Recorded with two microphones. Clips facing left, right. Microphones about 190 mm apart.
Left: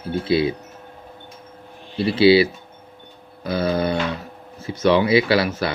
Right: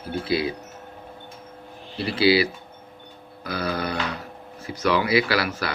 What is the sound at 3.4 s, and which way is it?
Speech, 25° left (ahead or behind).